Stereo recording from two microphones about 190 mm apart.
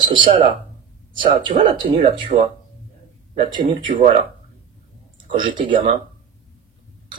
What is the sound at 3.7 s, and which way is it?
Speech, 25° right (ahead or behind).